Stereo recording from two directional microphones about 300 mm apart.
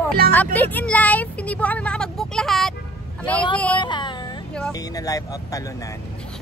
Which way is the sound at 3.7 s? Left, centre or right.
Centre.